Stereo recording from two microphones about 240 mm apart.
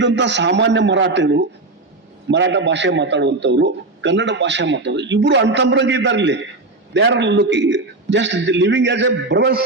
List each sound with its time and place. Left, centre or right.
0.0 s a man's voice: right